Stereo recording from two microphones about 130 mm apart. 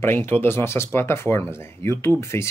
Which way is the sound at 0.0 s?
15° left (ahead or behind).